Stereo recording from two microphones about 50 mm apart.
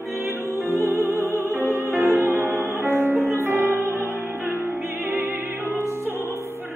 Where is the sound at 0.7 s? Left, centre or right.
Right.